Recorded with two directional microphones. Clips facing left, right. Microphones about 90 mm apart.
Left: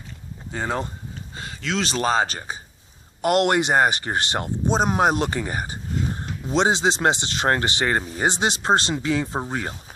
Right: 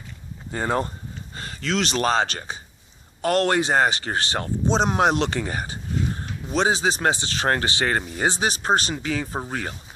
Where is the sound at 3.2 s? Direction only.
20° left (ahead or behind).